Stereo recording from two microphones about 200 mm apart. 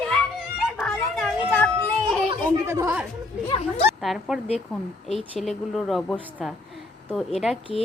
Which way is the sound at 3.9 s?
Centre (ahead or behind).